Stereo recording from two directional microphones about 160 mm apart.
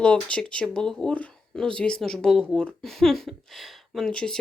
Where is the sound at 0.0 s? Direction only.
5° left (ahead or behind).